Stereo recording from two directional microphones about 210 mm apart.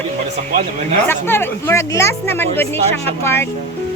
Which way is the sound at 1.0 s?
10° left (ahead or behind).